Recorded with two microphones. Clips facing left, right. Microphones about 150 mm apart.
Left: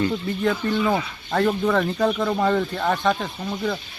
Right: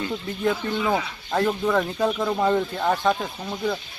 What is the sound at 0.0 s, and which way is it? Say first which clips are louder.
Speech: left 3 dB; 10° right (ahead or behind).